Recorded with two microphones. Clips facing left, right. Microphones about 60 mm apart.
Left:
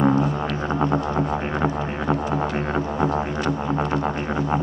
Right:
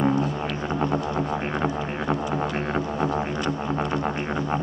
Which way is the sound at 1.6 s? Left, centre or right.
Centre.